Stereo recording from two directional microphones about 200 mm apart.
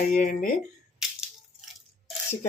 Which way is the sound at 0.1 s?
45° left (ahead or behind).